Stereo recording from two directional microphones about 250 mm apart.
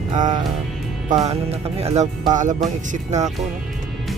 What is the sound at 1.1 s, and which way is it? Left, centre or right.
Speech, right.